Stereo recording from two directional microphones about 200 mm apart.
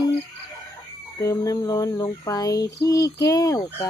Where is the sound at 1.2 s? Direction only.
15° left (ahead or behind).